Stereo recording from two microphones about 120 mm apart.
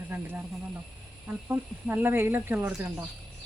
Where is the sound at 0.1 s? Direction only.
15° right (ahead or behind).